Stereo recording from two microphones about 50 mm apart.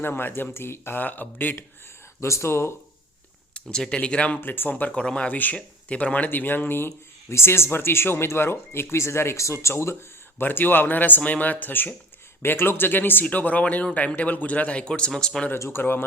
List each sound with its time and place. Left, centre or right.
0.0 s speech: left
1.0 s speech: left
2.2 s speech: left
3.5 s a man's voice: centre
4.4 s speech: left
4.9 s a man's voice: centre
5.3 s speech: left
10.4 s speech: left
12.4 s a man's voice: left; by 15.4 s centre
15.7 s speech: left